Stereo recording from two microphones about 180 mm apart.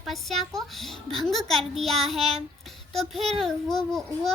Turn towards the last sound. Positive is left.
turn(degrees=0)  # may be behind; listen again after turning